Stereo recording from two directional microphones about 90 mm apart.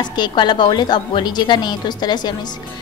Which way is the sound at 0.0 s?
55° left (ahead or behind).